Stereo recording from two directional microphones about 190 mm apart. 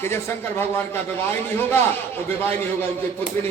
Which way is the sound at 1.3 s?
10° left (ahead or behind).